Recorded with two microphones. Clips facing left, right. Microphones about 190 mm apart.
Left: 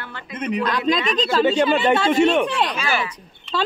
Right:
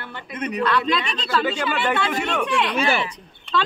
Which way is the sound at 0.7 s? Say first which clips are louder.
Left 1 dB; 40° left (ahead or behind).